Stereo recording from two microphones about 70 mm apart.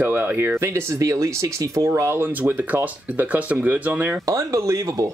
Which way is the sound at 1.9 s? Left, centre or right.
Right.